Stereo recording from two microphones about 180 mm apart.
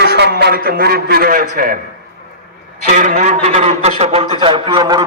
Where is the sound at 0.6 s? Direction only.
60° right (ahead or behind).